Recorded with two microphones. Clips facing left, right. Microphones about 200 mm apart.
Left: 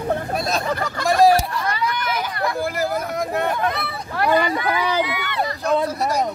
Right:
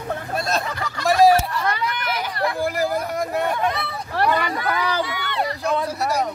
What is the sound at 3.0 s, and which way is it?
Speech, 10° right (ahead or behind).